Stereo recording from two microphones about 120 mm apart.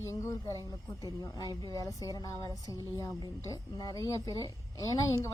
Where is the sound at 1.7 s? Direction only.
30° left (ahead or behind).